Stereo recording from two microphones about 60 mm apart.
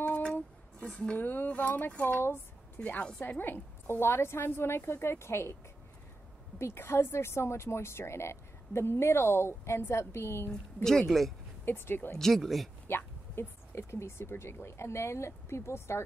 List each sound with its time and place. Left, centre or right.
0.2 s a sound: left
1.1 s speech: left
3.2 s a woman's voice: left
6.6 s a woman's voice: left
10.5 s speech: centre
11.6 s a woman's voice: left
12.2 s speech: centre
12.8 s speech: left